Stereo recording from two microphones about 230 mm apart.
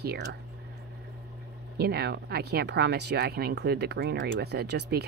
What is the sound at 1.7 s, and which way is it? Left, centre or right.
Speech, right.